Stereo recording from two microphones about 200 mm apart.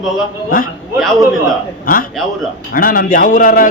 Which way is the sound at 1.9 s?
45° left (ahead or behind).